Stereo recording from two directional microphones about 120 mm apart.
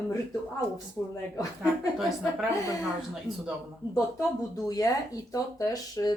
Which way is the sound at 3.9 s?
30° left (ahead or behind).